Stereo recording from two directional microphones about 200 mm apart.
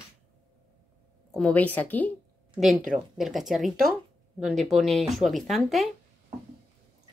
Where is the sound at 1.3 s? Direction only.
5° left (ahead or behind).